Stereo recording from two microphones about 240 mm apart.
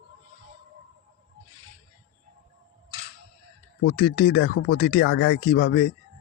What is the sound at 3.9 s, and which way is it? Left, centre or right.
Speech, left.